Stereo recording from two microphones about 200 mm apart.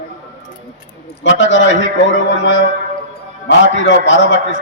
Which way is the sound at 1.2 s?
65° left (ahead or behind).